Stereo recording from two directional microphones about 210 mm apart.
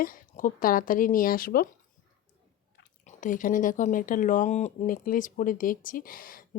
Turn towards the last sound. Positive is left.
turn(degrees=40)  # may be behind; listen again after turning